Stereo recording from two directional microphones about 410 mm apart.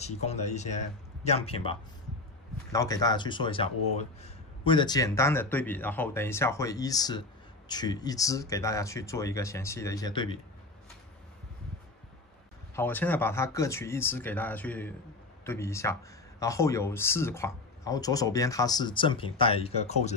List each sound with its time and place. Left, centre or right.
0.0 s speech: centre
12.7 s speech: centre